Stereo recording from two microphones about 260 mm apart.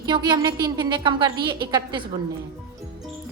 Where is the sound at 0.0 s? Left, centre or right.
Centre.